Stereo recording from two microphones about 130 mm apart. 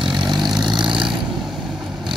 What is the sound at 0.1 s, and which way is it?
Vehicle, 35° right (ahead or behind).